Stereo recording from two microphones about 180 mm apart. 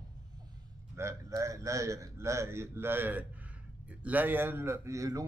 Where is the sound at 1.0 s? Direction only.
15° right (ahead or behind).